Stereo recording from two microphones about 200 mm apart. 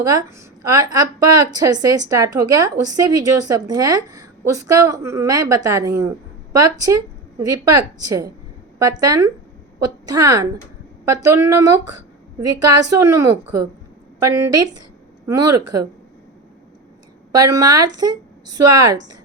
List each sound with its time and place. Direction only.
0.0 s a woman's voice: 15° right (ahead or behind)
12.9 s a woman's voice: 15° right (ahead or behind)
17.3 s a woman's voice: 15° right (ahead or behind)